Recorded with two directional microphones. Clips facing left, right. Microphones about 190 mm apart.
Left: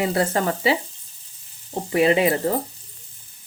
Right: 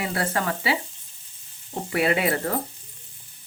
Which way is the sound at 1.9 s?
20° left (ahead or behind).